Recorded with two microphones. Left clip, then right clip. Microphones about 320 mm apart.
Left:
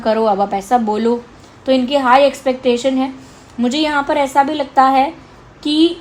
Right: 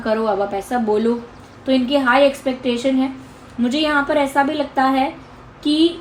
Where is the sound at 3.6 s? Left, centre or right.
Left.